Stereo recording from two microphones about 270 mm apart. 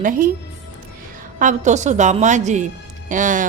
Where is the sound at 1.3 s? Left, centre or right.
Right.